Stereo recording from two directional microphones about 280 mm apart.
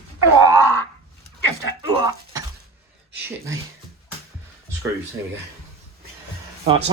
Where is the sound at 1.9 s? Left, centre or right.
Centre.